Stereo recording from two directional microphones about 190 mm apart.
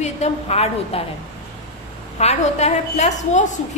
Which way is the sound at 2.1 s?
35° left (ahead or behind).